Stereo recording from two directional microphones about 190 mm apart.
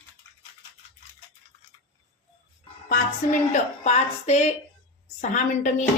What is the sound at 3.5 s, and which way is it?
Speech, 35° left (ahead or behind).